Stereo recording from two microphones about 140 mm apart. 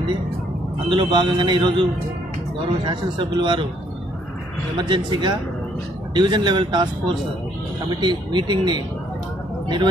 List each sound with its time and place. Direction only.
0.8 s a man's voice: 35° right (ahead or behind)
4.7 s a man's voice: 35° right (ahead or behind)